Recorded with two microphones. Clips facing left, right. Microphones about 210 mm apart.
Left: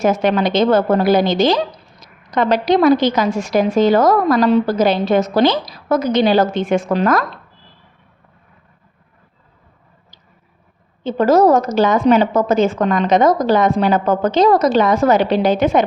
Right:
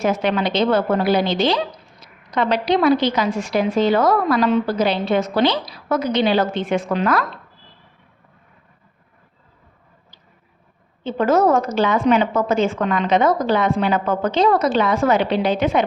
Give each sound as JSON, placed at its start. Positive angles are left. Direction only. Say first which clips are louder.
{"t": 0.0, "sound": "a woman's voice", "louder": "left 4 dB", "side_deg": 45}
{"t": 11.0, "sound": "a woman's voice", "louder": "left 4 dB", "side_deg": 40}